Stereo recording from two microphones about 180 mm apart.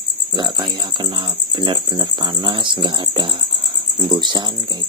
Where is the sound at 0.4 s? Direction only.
25° right (ahead or behind).